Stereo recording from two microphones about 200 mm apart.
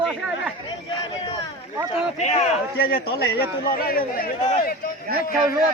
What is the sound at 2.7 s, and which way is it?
A man's voice, 50° left (ahead or behind).